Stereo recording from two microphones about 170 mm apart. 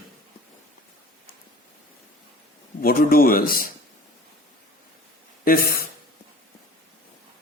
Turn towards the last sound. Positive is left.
turn(degrees=55)  # may be behind; listen again after turning